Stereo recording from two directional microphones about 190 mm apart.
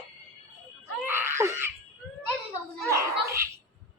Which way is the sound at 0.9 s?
15° right (ahead or behind).